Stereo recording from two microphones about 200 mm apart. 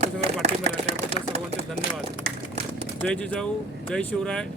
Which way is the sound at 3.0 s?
5° left (ahead or behind).